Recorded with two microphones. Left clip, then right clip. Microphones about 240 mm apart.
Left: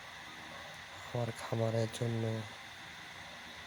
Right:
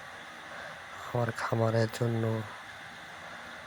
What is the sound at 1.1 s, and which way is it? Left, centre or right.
Speech, right.